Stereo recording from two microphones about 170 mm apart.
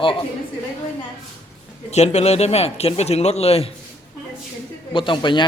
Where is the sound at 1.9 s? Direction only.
40° left (ahead or behind).